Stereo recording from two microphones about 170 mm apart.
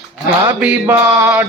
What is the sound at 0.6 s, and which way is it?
Music, 5° right (ahead or behind).